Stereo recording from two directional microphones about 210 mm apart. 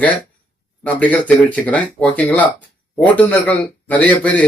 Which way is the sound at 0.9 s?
5° left (ahead or behind).